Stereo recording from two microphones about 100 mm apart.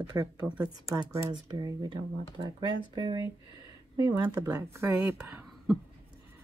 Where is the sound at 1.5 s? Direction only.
45° right (ahead or behind); by 5.4 s 30° right (ahead or behind).